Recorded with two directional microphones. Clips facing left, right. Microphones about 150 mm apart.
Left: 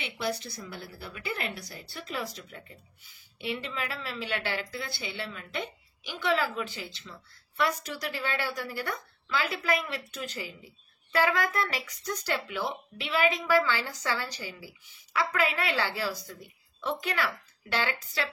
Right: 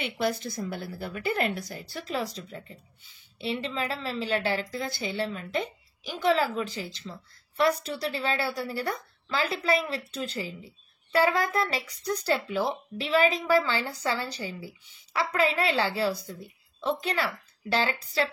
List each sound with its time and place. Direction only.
0.2 s a woman's voice: 45° right (ahead or behind)